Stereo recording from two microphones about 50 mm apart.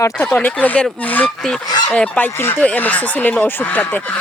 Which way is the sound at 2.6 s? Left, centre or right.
Left.